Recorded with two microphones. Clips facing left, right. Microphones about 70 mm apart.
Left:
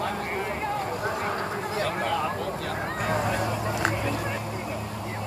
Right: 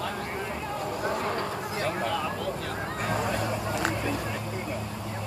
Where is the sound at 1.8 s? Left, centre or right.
Left.